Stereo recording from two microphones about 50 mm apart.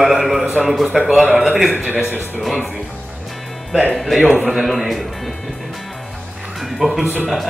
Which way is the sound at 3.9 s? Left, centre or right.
Centre.